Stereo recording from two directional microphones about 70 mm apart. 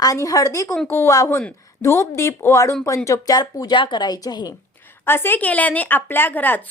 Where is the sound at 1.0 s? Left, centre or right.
Left.